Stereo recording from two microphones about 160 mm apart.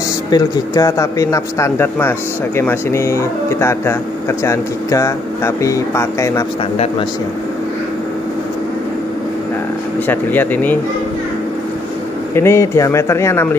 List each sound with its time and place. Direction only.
0.3 s a man's voice: 20° left (ahead or behind)
10.0 s a man's voice: 10° left (ahead or behind)
12.4 s a man's voice: 15° left (ahead or behind)